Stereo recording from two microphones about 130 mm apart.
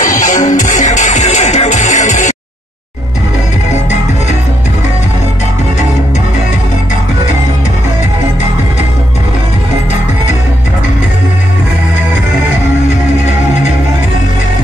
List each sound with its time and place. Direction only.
0.0 s music: 80° left